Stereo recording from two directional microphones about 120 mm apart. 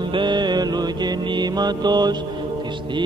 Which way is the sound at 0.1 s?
40° right (ahead or behind).